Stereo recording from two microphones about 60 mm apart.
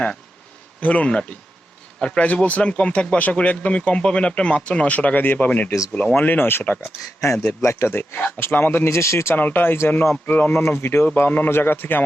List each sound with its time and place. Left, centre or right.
0.8 s speech: left
6.1 s a man's voice: left
9.3 s a man's voice: left
10.8 s speech: left
11.0 s a man's voice: left